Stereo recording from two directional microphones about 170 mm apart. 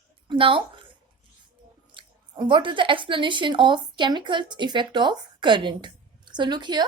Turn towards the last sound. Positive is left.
turn(degrees=-25)  # may be behind; listen again after turning